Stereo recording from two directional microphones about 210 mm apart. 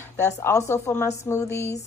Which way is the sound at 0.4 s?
15° left (ahead or behind).